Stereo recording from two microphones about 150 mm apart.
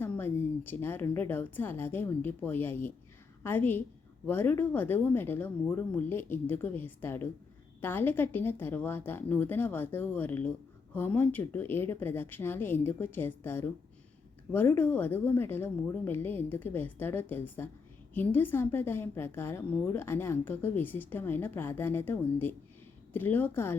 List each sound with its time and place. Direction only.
0.0 s a woman's voice: 15° left (ahead or behind)